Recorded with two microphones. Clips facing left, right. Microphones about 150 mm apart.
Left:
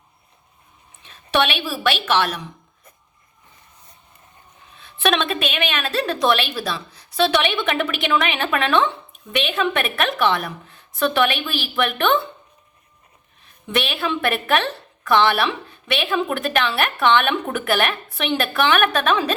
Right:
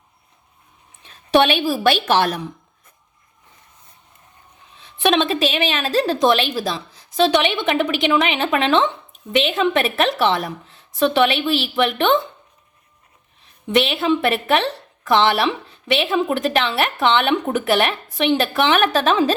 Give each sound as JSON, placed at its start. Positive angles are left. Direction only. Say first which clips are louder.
{"t": 1.3, "sound": "a woman's voice", "louder": "right 5 dB", "side_deg": -40}
{"t": 4.8, "sound": "a woman's voice", "louder": "right 3 dB", "side_deg": -25}
{"t": 6.1, "sound": "a woman's voice", "louder": "right 3 dB", "side_deg": -20}
{"t": 13.7, "sound": "a woman's voice", "louder": "right 6 dB", "side_deg": -25}